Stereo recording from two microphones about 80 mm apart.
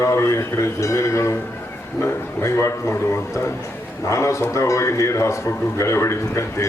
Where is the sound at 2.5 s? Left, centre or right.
Left.